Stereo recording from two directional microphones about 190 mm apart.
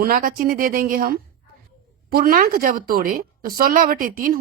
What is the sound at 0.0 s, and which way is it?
A woman's voice, 50° right (ahead or behind).